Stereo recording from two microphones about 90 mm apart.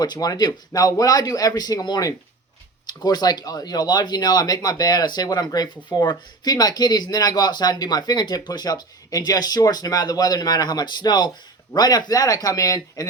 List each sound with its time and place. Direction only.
0.0 s speech: 45° left (ahead or behind)